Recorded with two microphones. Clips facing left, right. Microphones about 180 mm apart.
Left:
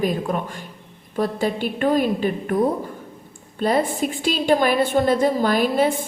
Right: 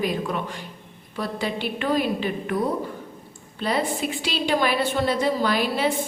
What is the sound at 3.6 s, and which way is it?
A woman's voice, 50° left (ahead or behind).